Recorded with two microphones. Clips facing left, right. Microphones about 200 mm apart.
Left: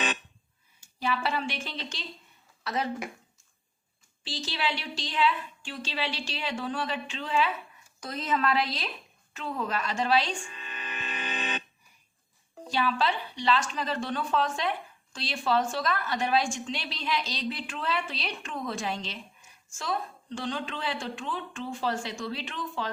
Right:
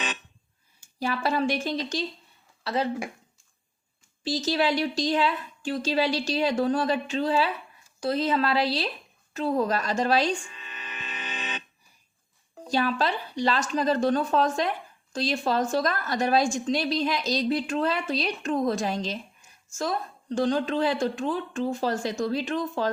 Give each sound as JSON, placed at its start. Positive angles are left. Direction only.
{"t": 0.8, "sound": "a woman's voice", "side_deg": -40}
{"t": 2.6, "sound": "speech", "side_deg": -30}
{"t": 4.2, "sound": "a woman's voice", "side_deg": -40}
{"t": 10.5, "sound": "music", "side_deg": 55}
{"t": 12.6, "sound": "a woman's voice", "side_deg": -40}